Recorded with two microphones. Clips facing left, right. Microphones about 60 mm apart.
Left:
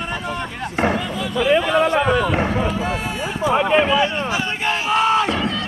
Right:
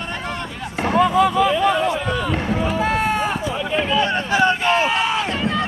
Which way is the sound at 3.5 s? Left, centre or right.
Left.